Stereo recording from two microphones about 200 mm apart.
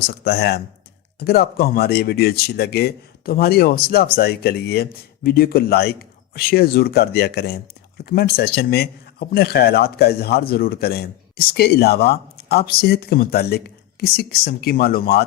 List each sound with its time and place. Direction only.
0.0 s speech: 50° left (ahead or behind)